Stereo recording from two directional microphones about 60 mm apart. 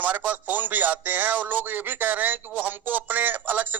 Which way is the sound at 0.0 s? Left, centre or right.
Right.